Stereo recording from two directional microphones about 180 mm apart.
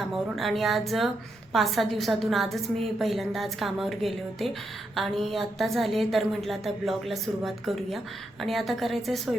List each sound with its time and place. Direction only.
0.0 s a woman's voice: centre (ahead or behind)